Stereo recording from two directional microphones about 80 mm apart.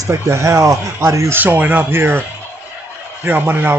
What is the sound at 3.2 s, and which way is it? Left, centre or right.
Speech, right.